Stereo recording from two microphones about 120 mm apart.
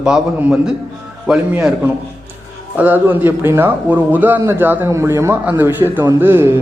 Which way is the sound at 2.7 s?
15° right (ahead or behind).